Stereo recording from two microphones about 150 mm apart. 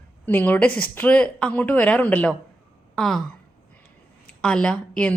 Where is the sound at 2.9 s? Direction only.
5° left (ahead or behind).